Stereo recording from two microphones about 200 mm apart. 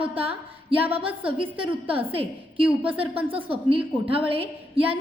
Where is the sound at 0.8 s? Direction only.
30° right (ahead or behind).